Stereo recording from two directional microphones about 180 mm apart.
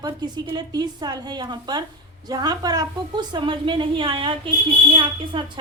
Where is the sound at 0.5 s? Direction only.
20° right (ahead or behind).